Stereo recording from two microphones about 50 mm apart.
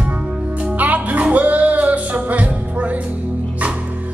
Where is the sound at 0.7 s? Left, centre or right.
Right.